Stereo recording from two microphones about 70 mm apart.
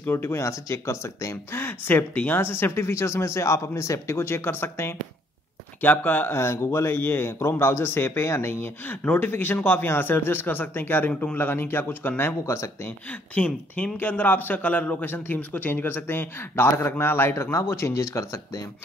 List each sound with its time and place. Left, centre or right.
0.1 s speech: left
1.6 s speech: left
5.8 s speech: left
6.3 s speech: left
12.8 s speech: centre; by 18.4 s left